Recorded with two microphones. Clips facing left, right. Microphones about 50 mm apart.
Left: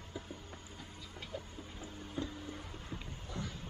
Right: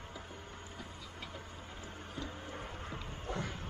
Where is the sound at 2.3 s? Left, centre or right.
Right.